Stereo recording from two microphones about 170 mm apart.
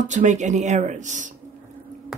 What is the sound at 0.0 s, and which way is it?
Speech, 45° right (ahead or behind).